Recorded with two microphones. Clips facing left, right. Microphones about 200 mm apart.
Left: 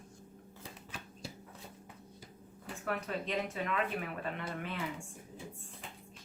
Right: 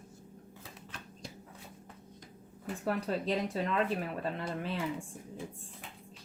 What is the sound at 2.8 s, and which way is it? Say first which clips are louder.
Speech: right 4 dB; 35° right (ahead or behind).